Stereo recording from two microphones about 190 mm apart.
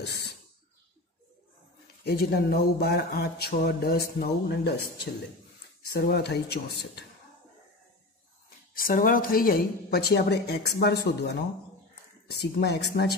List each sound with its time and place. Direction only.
2.0 s speech: 55° left (ahead or behind)
8.7 s speech: 50° left (ahead or behind)